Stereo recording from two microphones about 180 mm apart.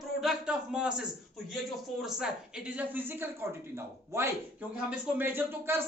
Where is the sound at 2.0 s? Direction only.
5° right (ahead or behind).